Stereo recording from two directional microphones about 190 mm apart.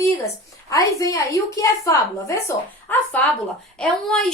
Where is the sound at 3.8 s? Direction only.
5° left (ahead or behind).